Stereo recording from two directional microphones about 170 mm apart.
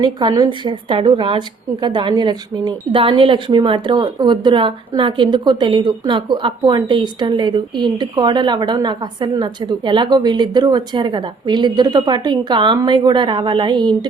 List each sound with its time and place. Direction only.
0.0 s a woman's voice: 25° right (ahead or behind)